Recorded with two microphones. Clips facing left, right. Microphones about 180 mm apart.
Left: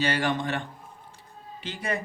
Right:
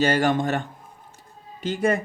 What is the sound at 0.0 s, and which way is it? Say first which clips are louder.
Speech: right 6 dB; 45° right (ahead or behind).